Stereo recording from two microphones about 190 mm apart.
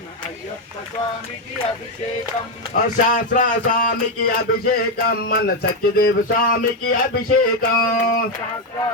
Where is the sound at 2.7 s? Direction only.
40° left (ahead or behind).